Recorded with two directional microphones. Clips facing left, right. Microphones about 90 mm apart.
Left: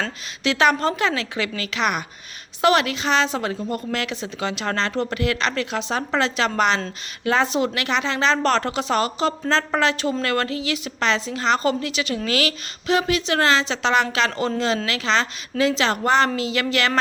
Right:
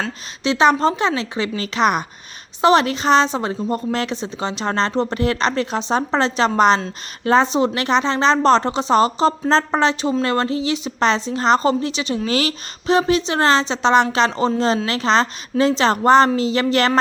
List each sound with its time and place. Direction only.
0.4 s a woman's voice: 25° right (ahead or behind)